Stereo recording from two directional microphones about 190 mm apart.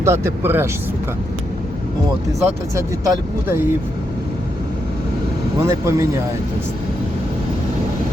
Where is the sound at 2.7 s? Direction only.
15° right (ahead or behind).